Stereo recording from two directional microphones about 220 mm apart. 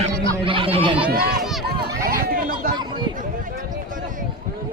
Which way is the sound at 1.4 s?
Centre (ahead or behind).